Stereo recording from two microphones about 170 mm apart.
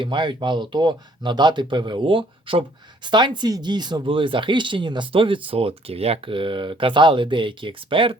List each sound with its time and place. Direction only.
0.0 s speech: 25° right (ahead or behind)